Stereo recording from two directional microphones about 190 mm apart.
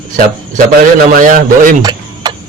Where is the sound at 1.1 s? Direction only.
45° right (ahead or behind).